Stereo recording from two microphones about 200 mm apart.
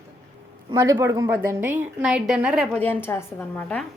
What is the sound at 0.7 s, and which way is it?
A woman's voice, 15° right (ahead or behind).